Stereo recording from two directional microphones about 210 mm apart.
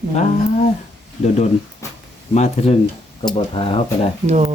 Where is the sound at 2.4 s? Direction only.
30° left (ahead or behind).